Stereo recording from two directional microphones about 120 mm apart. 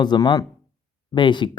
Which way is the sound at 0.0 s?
35° left (ahead or behind).